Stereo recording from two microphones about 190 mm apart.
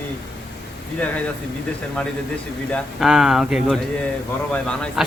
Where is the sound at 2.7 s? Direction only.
Centre (ahead or behind).